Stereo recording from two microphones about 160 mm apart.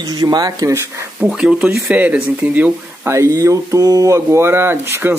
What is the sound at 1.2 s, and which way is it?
Speech, 5° right (ahead or behind).